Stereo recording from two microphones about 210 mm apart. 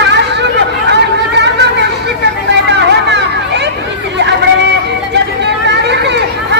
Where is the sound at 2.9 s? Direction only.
55° right (ahead or behind).